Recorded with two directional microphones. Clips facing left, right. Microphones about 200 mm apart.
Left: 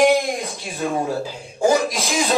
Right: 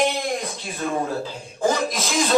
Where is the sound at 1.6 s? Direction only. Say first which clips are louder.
Left 4 dB; 10° left (ahead or behind).